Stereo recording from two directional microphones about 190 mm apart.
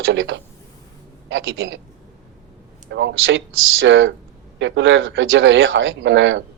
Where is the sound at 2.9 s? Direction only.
70° right (ahead or behind).